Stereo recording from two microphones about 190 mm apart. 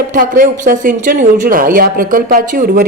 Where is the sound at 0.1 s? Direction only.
45° right (ahead or behind).